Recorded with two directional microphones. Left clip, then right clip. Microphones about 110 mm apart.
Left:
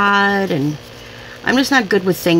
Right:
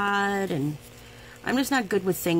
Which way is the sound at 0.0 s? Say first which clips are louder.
Left 11 dB; 25° right (ahead or behind).